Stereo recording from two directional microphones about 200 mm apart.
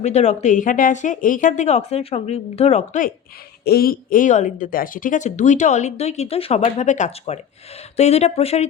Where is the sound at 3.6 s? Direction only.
50° left (ahead or behind).